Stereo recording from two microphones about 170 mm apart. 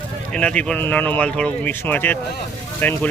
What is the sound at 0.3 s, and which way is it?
Speech, 5° left (ahead or behind).